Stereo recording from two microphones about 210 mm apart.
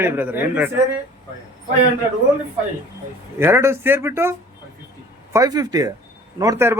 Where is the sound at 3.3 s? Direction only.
10° right (ahead or behind).